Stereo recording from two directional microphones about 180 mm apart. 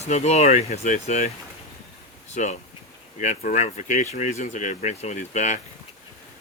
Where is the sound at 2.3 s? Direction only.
40° left (ahead or behind).